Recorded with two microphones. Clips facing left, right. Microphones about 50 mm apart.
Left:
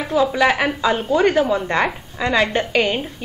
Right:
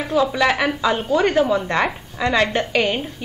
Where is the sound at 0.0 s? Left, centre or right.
Centre.